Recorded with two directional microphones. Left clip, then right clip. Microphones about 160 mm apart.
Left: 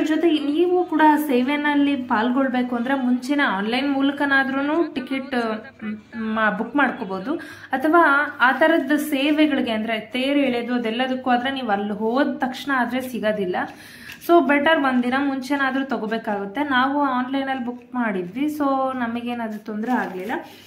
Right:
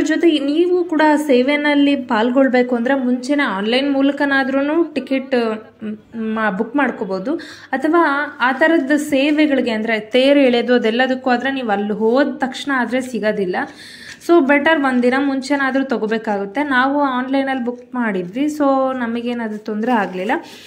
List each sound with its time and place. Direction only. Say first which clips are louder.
0.0 s a woman's voice: right 5 dB; 25° right (ahead or behind)
19.9 s speech: right 7 dB; 45° right (ahead or behind)